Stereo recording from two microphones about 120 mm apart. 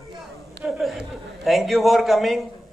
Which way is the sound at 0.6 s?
Centre (ahead or behind).